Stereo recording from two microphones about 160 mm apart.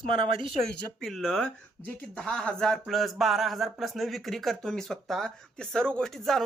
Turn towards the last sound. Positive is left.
turn(degrees=5)  # may be behind; listen again after turning